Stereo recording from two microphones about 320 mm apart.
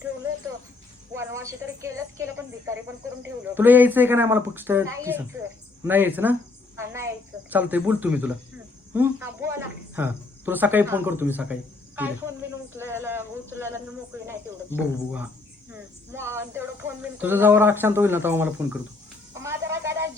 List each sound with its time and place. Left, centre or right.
1.1 s a woman's voice: centre
6.7 s cricket: centre
7.5 s speech: centre
11.9 s a sound: centre
14.8 s speech: centre
16.1 s speech: centre
19.3 s a sound: centre